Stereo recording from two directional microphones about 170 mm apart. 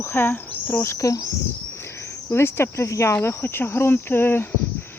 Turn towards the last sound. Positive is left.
turn(degrees=15)  # may be behind; listen again after turning